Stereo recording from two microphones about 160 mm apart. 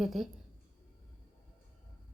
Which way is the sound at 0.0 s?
Centre (ahead or behind).